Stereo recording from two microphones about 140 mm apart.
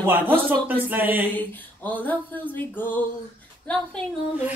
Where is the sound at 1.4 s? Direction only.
10° left (ahead or behind).